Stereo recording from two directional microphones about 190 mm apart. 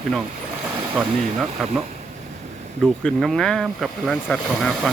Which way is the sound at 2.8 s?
Centre (ahead or behind).